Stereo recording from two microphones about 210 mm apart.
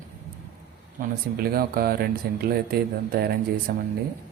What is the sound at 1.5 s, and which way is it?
Speech, 45° right (ahead or behind).